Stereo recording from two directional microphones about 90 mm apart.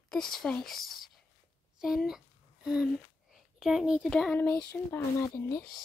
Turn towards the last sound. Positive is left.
turn(degrees=35)  # may be behind; listen again after turning